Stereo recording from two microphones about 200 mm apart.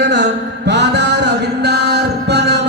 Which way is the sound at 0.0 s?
60° right (ahead or behind).